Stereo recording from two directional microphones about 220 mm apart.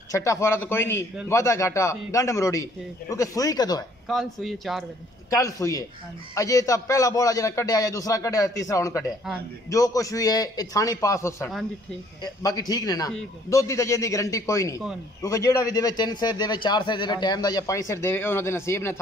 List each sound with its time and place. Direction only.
0.1 s a man's voice: 15° left (ahead or behind)
4.1 s speech: centre (ahead or behind)
5.3 s a man's voice: 15° left (ahead or behind)